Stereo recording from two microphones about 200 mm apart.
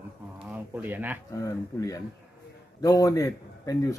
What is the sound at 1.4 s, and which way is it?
A man's voice, 15° left (ahead or behind).